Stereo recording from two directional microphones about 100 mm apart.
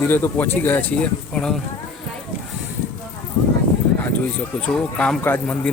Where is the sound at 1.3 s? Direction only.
5° left (ahead or behind).